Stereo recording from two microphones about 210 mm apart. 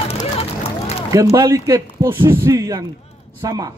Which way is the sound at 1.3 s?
15° right (ahead or behind).